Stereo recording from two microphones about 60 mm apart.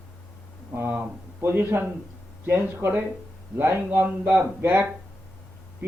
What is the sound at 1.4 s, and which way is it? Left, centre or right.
A man's voice, right.